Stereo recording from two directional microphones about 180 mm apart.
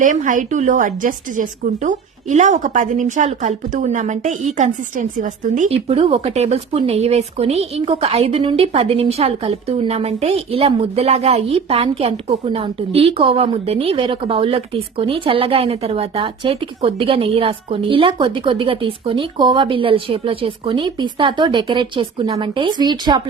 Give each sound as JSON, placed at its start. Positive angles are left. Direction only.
{"t": 0.0, "sound": "a woman's voice", "side_deg": -45}